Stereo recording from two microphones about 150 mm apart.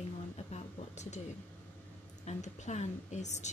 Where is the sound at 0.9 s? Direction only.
50° left (ahead or behind).